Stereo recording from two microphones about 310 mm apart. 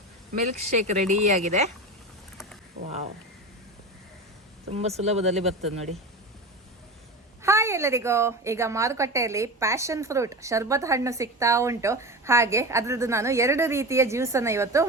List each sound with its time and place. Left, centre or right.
0.4 s speech: right
4.7 s speech: right
7.4 s a woman's voice: centre